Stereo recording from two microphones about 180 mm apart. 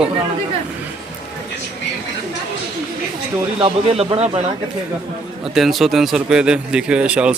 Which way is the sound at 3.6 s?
35° right (ahead or behind).